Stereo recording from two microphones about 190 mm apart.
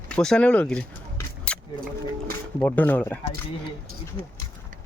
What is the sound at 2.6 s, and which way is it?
Speech, 10° left (ahead or behind).